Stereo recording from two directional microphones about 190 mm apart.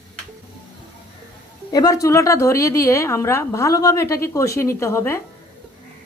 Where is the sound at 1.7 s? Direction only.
20° left (ahead or behind).